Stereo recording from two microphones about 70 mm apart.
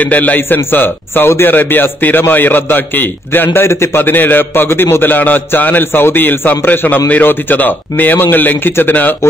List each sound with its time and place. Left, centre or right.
0.0 s a man's voice: left